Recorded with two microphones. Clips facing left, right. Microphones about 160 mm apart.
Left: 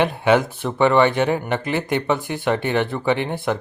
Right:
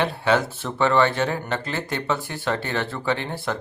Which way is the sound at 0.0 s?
15° left (ahead or behind).